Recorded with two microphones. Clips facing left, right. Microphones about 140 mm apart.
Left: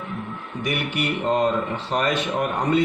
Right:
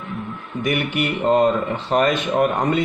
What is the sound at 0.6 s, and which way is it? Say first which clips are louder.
A man's voice: right 4 dB; 50° right (ahead or behind).